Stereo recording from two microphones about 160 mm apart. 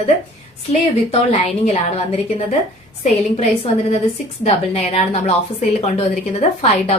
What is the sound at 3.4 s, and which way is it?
A woman's voice, 40° left (ahead or behind).